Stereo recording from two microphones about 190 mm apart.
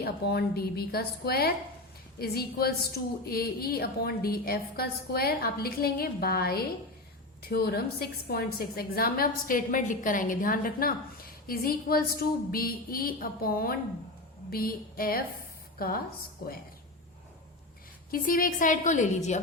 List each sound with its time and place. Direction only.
0.0 s a woman's voice: 55° left (ahead or behind)
18.1 s a woman's voice: 45° left (ahead or behind)